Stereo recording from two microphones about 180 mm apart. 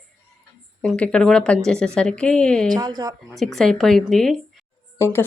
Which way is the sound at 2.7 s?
20° right (ahead or behind).